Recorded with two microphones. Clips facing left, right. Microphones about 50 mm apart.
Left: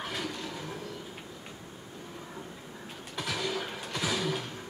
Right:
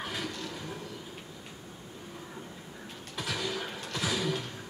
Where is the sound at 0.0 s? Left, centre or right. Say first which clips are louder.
Left 1 dB; centre.